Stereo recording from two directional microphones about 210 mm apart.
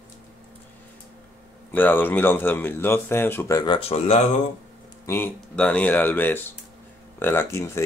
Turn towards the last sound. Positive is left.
turn(degrees=15)  # may be behind; listen again after turning